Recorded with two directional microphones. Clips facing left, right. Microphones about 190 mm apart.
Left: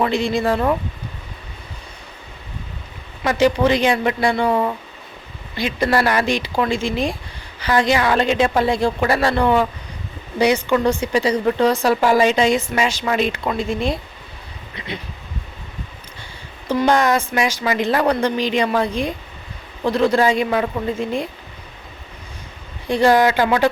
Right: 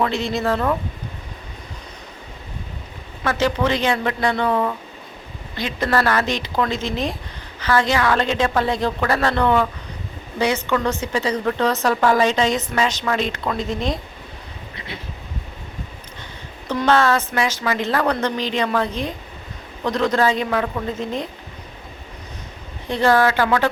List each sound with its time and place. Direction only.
0.0 s speech: 15° left (ahead or behind)
3.2 s speech: 15° left (ahead or behind)
14.8 s a sound: 20° left (ahead or behind)
16.6 s speech: 10° left (ahead or behind)
22.9 s speech: 15° left (ahead or behind)